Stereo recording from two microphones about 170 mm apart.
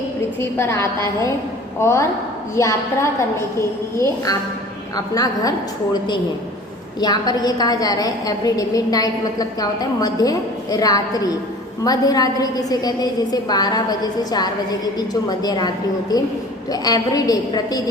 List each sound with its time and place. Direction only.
0.3 s a woman's voice: 15° left (ahead or behind)